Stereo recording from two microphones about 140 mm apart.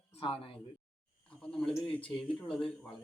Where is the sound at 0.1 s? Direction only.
40° left (ahead or behind).